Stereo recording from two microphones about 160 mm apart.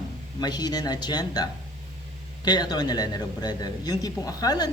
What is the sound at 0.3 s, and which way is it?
A man's voice, 25° left (ahead or behind).